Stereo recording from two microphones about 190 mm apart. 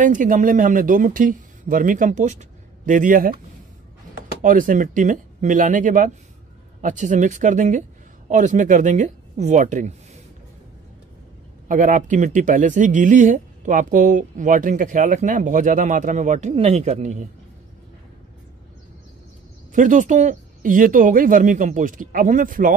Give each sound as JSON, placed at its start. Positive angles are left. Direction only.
{"t": 0.0, "sound": "speech", "side_deg": -45}
{"t": 4.4, "sound": "speech", "side_deg": -45}
{"t": 11.6, "sound": "speech", "side_deg": -45}
{"t": 19.7, "sound": "speech", "side_deg": -40}